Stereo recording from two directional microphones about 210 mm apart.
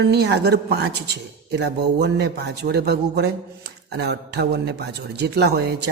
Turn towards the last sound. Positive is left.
turn(degrees=-50)  # may be behind; listen again after turning